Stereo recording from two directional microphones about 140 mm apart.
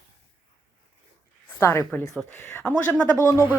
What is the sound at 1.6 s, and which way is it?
Speech, 20° left (ahead or behind).